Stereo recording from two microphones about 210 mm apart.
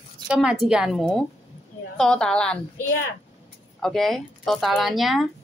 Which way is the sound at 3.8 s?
Centre (ahead or behind).